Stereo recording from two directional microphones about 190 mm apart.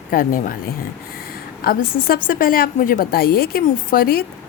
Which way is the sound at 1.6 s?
50° left (ahead or behind).